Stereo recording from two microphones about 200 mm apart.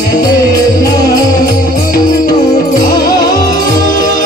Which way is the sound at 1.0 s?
20° left (ahead or behind).